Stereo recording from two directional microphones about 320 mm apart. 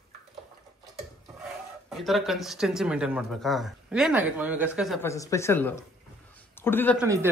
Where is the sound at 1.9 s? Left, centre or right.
Centre.